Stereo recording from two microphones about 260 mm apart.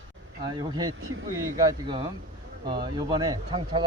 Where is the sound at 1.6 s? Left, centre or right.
Centre.